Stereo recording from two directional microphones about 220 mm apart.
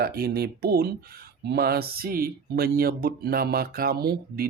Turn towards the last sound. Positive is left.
turn(degrees=-45)  # may be behind; listen again after turning